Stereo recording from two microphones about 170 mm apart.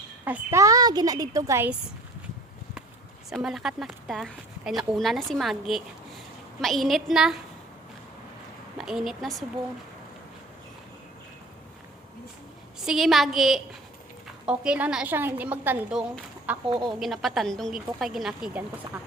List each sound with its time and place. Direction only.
0.3 s a woman's voice: 20° right (ahead or behind)
3.2 s speech: centre (ahead or behind)
8.8 s a woman's voice: centre (ahead or behind)
12.8 s a woman's voice: centre (ahead or behind)
16.6 s speech: 25° right (ahead or behind)
17.0 s speech: centre (ahead or behind)